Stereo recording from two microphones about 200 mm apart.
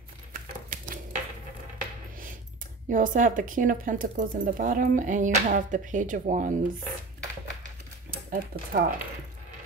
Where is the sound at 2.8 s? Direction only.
40° right (ahead or behind).